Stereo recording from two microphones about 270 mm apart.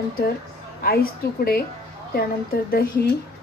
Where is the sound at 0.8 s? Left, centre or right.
Left.